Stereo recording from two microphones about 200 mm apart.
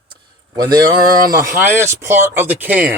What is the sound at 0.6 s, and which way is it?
Speech, 20° right (ahead or behind).